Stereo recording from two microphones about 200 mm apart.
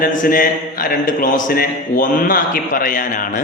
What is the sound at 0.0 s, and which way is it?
Speech, 40° left (ahead or behind).